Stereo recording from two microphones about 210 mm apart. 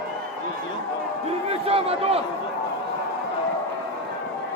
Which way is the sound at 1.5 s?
30° right (ahead or behind).